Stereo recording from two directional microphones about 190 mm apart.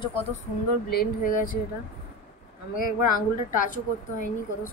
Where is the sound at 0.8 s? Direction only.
55° left (ahead or behind).